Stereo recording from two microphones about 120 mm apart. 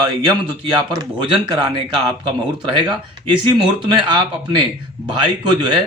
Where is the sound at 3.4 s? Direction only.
40° right (ahead or behind).